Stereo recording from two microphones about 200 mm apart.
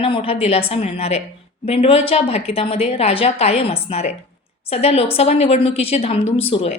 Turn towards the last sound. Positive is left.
turn(degrees=30)  # may be behind; listen again after turning